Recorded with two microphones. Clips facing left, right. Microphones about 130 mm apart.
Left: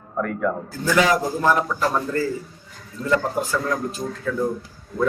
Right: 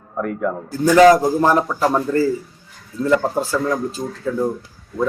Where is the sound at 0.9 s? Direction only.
40° right (ahead or behind).